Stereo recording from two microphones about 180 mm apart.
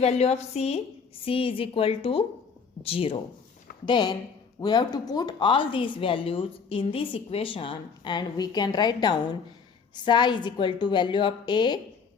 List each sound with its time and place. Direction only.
0.0 s a woman's voice: 35° left (ahead or behind)